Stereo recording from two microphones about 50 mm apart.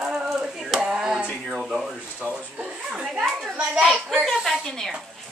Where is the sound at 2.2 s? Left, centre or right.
Right.